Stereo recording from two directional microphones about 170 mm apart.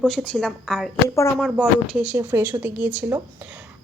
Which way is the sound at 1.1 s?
15° left (ahead or behind).